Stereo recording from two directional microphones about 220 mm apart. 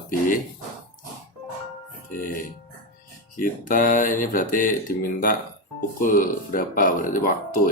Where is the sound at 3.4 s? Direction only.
40° left (ahead or behind).